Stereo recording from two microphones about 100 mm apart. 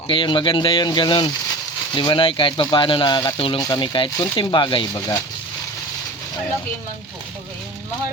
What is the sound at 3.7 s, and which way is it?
Speech, 55° left (ahead or behind).